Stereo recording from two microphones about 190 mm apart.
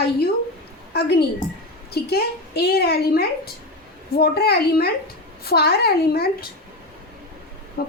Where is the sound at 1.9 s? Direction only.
55° left (ahead or behind).